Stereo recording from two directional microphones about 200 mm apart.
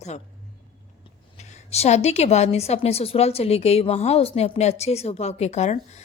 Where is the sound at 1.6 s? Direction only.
30° left (ahead or behind).